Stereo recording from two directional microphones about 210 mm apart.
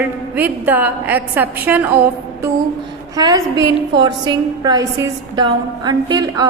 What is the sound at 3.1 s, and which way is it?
A woman's voice, 15° right (ahead or behind).